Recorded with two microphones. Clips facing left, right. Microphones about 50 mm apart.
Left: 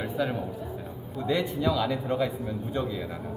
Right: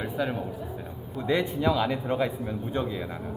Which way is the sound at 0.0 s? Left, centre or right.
Centre.